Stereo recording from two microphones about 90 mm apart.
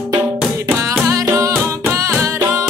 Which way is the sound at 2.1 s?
30° right (ahead or behind).